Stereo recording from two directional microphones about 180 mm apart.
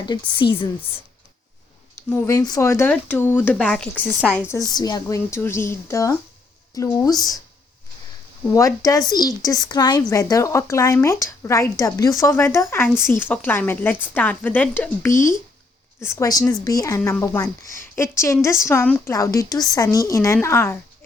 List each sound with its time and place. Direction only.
0.0 s a woman's voice: 25° left (ahead or behind)
2.2 s speech: 20° left (ahead or behind)
4.7 s a woman's voice: 20° left (ahead or behind)
8.5 s speech: 15° left (ahead or behind)